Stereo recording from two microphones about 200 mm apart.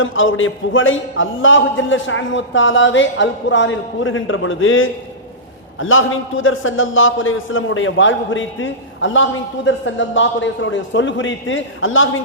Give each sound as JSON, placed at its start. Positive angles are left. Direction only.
{"t": 0.0, "sound": "a man's voice", "side_deg": 75}